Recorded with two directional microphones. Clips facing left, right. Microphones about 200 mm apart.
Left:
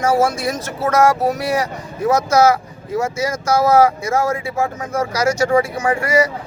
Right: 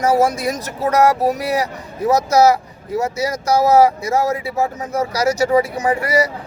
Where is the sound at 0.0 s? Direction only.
35° right (ahead or behind).